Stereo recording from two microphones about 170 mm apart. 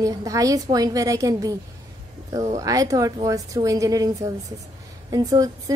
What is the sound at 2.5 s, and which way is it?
A woman's voice, 20° right (ahead or behind).